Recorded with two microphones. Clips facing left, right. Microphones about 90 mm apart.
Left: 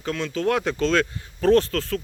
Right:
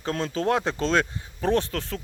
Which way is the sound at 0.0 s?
35° right (ahead or behind).